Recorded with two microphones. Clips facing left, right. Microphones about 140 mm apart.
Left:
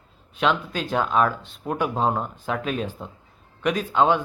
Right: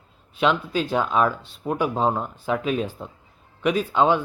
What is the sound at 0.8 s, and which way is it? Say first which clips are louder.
Speech: right 1 dB; 5° right (ahead or behind).